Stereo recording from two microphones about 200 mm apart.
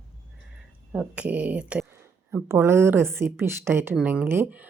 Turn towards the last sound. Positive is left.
turn(degrees=-10)  # may be behind; listen again after turning